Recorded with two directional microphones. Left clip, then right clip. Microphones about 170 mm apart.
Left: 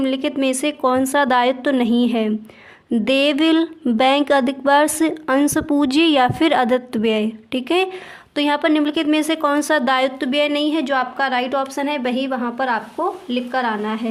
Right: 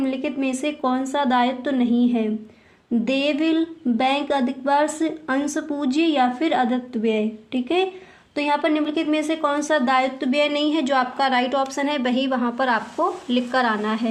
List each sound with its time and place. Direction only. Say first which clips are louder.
0.0 s a woman's voice: left 5 dB; 40° left (ahead or behind)
10.4 s a woman's voice: left 2 dB; 25° left (ahead or behind); by 14.1 s 5° left (ahead or behind)